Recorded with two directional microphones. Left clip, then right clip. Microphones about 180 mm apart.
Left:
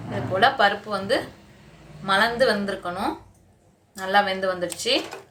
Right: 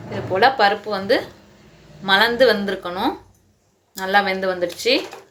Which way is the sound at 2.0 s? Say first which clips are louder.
Right 5 dB; 40° right (ahead or behind).